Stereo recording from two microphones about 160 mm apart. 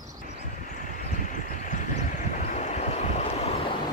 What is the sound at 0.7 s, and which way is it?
Vehicle, 55° left (ahead or behind).